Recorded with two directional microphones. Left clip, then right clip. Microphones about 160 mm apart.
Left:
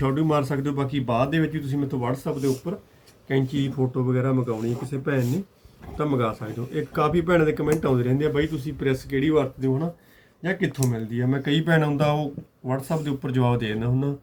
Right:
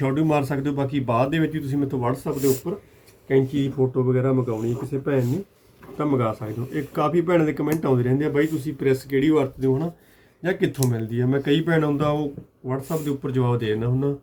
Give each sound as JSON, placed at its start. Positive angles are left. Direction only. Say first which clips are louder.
{"t": 0.0, "sound": "speech", "louder": "right 1 dB", "side_deg": -30}
{"t": 2.3, "sound": "speech", "louder": "right 5 dB", "side_deg": -50}
{"t": 3.2, "sound": "speech", "louder": "right 4 dB", "side_deg": 5}
{"t": 4.5, "sound": "speech", "louder": "right 3 dB", "side_deg": 10}
{"t": 6.0, "sound": "speech", "louder": "right 1 dB", "side_deg": -15}
{"t": 11.3, "sound": "speech", "louder": "right 5 dB", "side_deg": 0}
{"t": 11.6, "sound": "speech", "louder": "even", "side_deg": 25}